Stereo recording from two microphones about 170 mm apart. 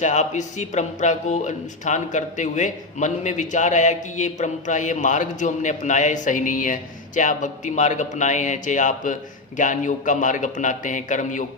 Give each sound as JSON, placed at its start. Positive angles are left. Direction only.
{"t": 0.0, "sound": "speech", "side_deg": 45}